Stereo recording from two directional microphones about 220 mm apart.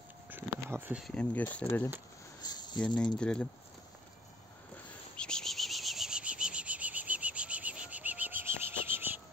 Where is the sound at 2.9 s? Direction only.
5° left (ahead or behind).